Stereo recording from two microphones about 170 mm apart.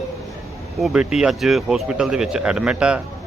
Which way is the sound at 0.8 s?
5° right (ahead or behind).